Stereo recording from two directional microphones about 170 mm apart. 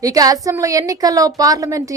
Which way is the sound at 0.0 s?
20° right (ahead or behind).